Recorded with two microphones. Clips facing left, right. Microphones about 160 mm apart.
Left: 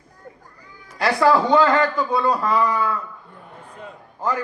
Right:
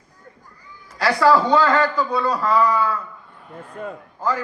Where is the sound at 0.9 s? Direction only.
20° left (ahead or behind).